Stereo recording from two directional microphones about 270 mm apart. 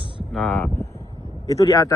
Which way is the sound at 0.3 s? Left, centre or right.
Centre.